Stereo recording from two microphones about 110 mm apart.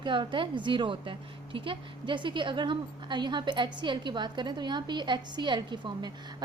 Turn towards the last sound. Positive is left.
turn(degrees=-45)  # may be behind; listen again after turning